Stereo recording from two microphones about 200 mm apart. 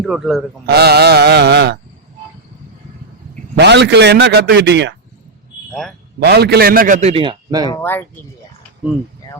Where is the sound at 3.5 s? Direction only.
60° right (ahead or behind).